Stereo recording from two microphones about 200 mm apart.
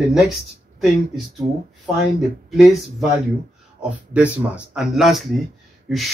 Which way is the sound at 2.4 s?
Centre (ahead or behind).